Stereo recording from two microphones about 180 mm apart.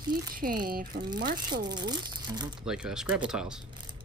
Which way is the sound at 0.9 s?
65° right (ahead or behind).